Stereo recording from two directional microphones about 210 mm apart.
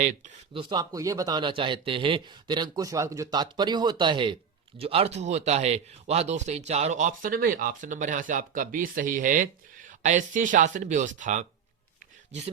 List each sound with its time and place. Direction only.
0.0 s speech: 35° right (ahead or behind)
0.6 s a man's voice: 20° right (ahead or behind); by 11.4 s 35° right (ahead or behind)